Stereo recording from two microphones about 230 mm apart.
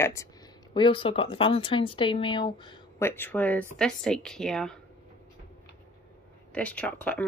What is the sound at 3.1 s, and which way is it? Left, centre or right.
A woman's voice, centre.